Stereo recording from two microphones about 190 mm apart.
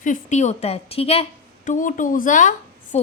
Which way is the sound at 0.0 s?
40° left (ahead or behind).